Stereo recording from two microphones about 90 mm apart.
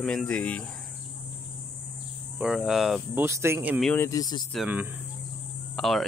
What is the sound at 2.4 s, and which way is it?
Speech, 5° right (ahead or behind).